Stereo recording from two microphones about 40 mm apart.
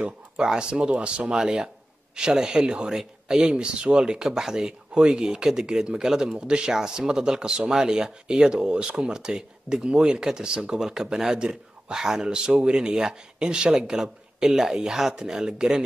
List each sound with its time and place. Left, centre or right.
0.4 s speech: centre
1.4 s speech: centre
11.1 s speech: centre